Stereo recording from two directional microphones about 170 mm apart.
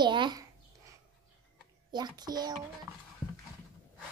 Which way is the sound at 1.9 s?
25° right (ahead or behind).